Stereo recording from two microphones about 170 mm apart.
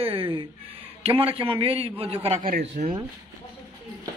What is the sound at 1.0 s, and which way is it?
A man's voice, 35° right (ahead or behind).